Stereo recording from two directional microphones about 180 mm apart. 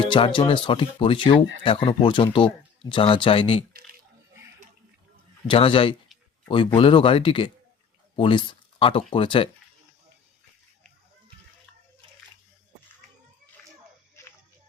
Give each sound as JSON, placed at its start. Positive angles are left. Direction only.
{"t": 0.0, "sound": "speech", "side_deg": 30}
{"t": 5.5, "sound": "speech", "side_deg": 30}
{"t": 8.1, "sound": "a sound", "side_deg": 30}
{"t": 9.0, "sound": "speech", "side_deg": 30}
{"t": 14.2, "sound": "music", "side_deg": 15}